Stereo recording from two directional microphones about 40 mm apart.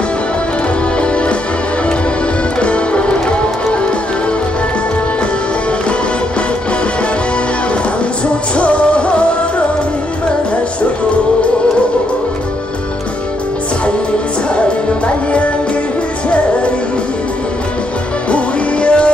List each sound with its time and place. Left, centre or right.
1.0 s music: left
2.6 s music: left
8.5 s music: left
18.3 s music: left